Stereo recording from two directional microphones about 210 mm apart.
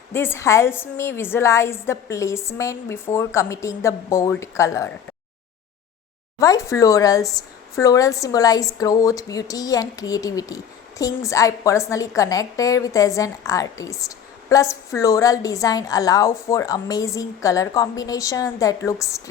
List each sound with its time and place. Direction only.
0.1 s speech: 10° left (ahead or behind)
6.4 s speech: 15° left (ahead or behind)